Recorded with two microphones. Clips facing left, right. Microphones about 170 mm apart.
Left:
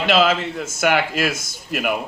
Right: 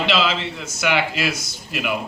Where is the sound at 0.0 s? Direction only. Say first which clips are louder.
Left 4 dB; 50° left (ahead or behind).